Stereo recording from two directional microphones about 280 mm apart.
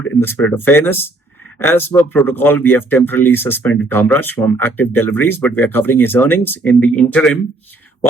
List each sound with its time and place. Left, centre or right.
0.2 s speech: centre